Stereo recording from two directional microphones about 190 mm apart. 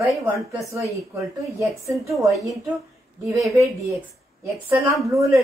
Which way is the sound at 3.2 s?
Centre (ahead or behind).